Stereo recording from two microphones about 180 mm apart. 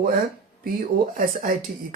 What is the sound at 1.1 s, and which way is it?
Speech, 50° right (ahead or behind).